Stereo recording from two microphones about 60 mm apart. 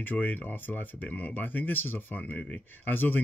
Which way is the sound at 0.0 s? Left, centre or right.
Left.